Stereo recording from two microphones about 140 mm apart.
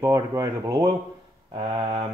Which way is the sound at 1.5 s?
35° right (ahead or behind).